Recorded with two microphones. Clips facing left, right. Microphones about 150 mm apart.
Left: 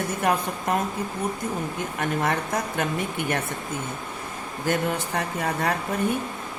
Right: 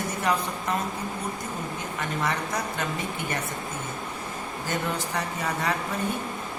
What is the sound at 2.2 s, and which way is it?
Speech, 55° left (ahead or behind).